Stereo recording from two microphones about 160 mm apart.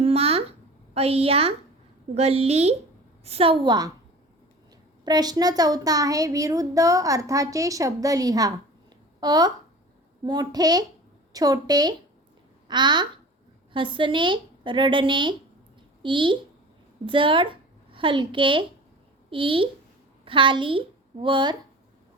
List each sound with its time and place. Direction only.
0.0 s a sound: 40° right (ahead or behind)
0.9 s speech: 40° right (ahead or behind)
5.0 s a child's voice: 25° right (ahead or behind)